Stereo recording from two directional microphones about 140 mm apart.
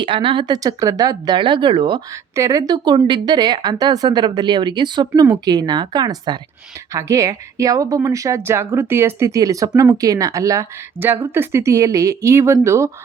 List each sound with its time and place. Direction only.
0.0 s speech: 40° right (ahead or behind)
2.3 s speech: 25° right (ahead or behind)